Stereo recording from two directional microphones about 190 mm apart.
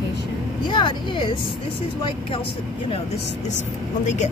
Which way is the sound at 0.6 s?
25° left (ahead or behind).